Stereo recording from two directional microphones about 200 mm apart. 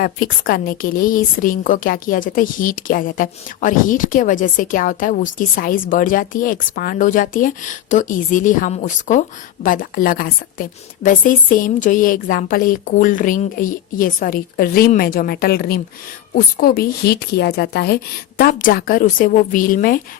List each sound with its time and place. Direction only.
0.0 s a woman's voice: 45° left (ahead or behind)